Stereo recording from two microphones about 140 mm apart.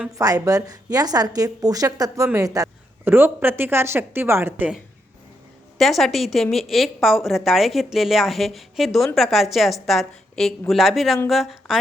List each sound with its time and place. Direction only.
0.2 s a woman's voice: 25° right (ahead or behind)
5.7 s a woman's voice: centre (ahead or behind)